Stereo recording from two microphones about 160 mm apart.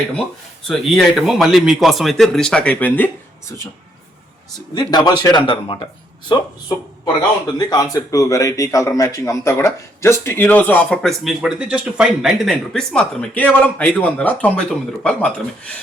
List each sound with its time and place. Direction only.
0.7 s speech: centre (ahead or behind)
4.7 s a man's voice: 25° left (ahead or behind); by 15.8 s 5° left (ahead or behind)